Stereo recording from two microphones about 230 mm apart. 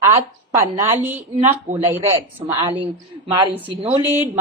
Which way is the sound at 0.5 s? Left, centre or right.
Centre.